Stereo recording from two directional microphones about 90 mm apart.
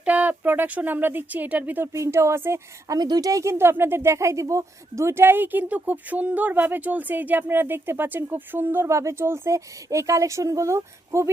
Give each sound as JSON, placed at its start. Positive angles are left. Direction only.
{"t": 0.0, "sound": "speech", "side_deg": -15}
{"t": 1.9, "sound": "speech", "side_deg": -30}
{"t": 2.8, "sound": "speech", "side_deg": -45}